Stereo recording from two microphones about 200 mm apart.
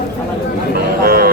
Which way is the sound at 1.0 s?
50° right (ahead or behind).